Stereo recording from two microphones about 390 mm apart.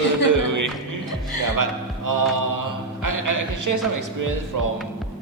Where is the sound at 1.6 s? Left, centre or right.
Right.